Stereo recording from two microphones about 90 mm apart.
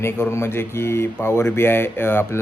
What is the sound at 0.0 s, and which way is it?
Speech, 30° left (ahead or behind).